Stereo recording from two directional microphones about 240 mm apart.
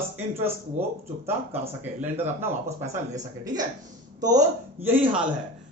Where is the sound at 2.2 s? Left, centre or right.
Centre.